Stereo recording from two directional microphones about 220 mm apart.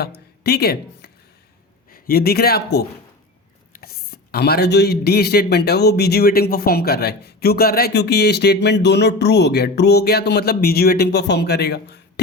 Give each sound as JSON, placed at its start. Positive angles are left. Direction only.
{"t": 0.4, "sound": "a man's voice", "side_deg": 45}